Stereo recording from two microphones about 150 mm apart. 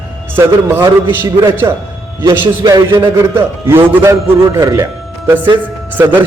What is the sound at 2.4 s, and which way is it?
Speech, 30° right (ahead or behind).